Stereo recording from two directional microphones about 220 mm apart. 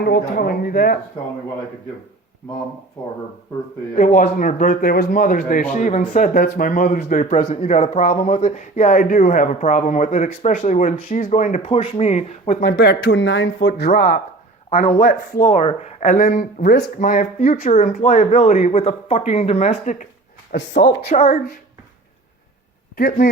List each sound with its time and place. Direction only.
0.0 s speech: 45° left (ahead or behind)
3.9 s speech: 40° left (ahead or behind)
12.6 s speech: 50° left (ahead or behind); by 20.1 s 35° left (ahead or behind)
20.5 s speech: 50° left (ahead or behind)
23.0 s speech: 40° left (ahead or behind)